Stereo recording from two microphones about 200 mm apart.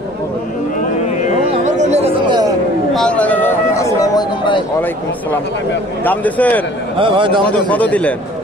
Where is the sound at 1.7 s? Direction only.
35° right (ahead or behind).